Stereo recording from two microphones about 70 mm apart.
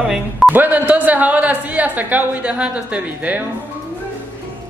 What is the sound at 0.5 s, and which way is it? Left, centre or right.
A woman's voice, right.